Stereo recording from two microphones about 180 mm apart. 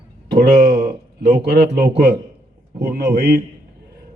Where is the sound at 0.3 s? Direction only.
65° right (ahead or behind).